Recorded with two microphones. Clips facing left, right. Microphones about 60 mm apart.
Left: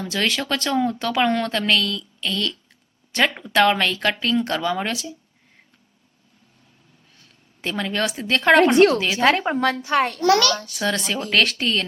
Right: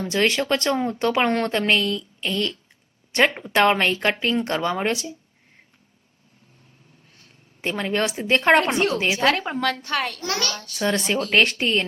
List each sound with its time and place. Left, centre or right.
0.0 s speech: right
7.6 s speech: right
9.1 s a woman's voice: left
10.2 s a child's voice: left
10.8 s speech: right